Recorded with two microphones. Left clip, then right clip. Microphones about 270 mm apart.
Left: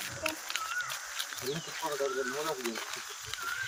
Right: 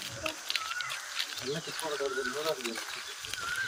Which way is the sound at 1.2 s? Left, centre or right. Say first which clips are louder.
Right 4 dB; left.